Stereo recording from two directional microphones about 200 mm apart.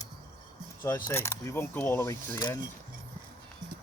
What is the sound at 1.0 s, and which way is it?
Speech, 15° left (ahead or behind).